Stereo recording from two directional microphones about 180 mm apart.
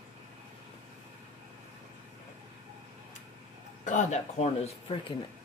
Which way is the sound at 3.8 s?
40° left (ahead or behind).